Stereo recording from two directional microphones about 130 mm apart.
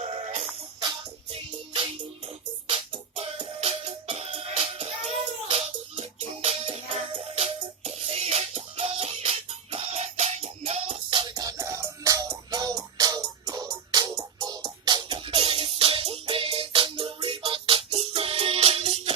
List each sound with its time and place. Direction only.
0.0 s music: 50° right (ahead or behind)
2.6 s music: 40° right (ahead or behind)
11.1 s music: 35° right (ahead or behind); by 19.1 s 50° right (ahead or behind)